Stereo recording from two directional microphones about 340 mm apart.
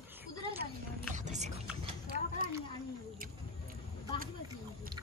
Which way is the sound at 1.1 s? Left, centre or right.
Right.